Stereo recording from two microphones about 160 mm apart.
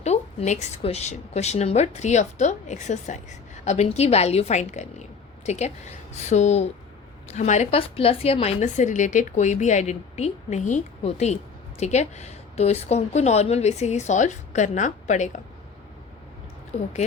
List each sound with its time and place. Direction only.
0.0 s a woman's voice: 45° left (ahead or behind)